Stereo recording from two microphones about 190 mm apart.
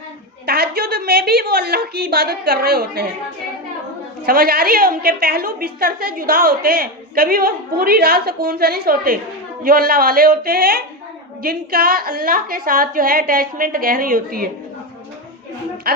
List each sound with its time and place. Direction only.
0.4 s a woman's voice: 55° right (ahead or behind)
4.3 s a woman's voice: 50° right (ahead or behind)